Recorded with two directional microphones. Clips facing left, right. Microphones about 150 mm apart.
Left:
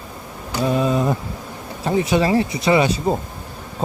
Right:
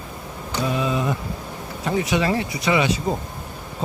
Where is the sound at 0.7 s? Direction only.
40° left (ahead or behind).